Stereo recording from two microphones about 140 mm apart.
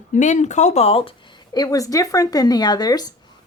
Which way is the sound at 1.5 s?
25° left (ahead or behind).